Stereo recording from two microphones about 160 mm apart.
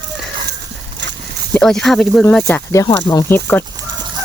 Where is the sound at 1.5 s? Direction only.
5° left (ahead or behind).